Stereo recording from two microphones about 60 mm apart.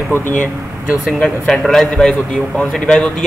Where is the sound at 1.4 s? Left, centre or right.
Centre.